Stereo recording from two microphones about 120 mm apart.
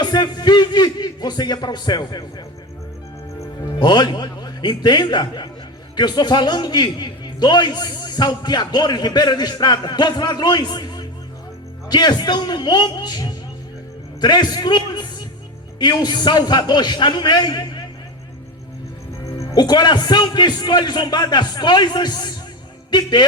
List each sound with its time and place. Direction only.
0.0 s music: 35° left (ahead or behind)
3.8 s a man's voice: 35° left (ahead or behind)
19.2 s a man's voice: 25° left (ahead or behind)